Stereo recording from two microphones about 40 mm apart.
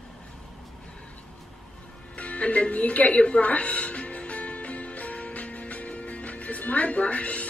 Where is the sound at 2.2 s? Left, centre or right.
Left.